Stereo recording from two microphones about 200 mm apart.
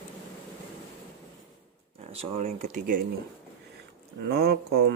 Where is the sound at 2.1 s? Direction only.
30° right (ahead or behind).